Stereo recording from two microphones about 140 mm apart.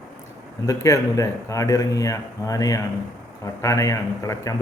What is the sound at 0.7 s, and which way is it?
A man's voice, 20° left (ahead or behind).